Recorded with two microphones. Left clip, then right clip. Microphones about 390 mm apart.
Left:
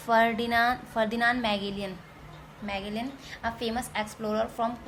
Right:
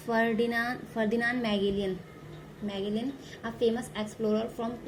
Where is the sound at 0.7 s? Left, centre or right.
Left.